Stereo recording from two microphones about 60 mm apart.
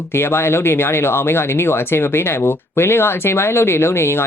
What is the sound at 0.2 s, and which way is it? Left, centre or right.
Speech, left.